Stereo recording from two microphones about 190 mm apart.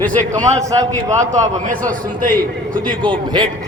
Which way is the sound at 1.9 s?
45° right (ahead or behind).